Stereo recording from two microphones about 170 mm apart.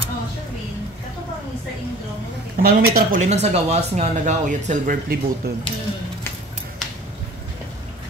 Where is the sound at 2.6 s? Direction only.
55° right (ahead or behind).